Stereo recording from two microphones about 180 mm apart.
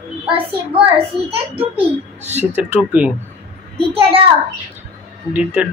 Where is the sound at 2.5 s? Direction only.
10° right (ahead or behind).